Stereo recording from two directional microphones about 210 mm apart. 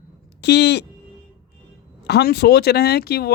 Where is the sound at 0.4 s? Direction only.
55° left (ahead or behind).